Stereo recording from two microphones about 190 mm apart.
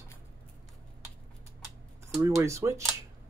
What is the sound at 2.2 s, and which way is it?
Speech, 15° right (ahead or behind).